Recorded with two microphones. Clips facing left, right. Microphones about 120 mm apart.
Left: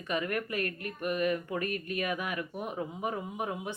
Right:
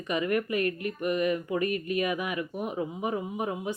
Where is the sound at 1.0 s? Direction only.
5° right (ahead or behind).